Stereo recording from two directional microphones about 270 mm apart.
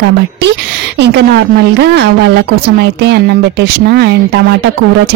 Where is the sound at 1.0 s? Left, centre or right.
Right.